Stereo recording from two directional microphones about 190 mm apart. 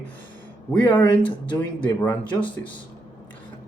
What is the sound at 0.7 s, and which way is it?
Speech, 10° left (ahead or behind).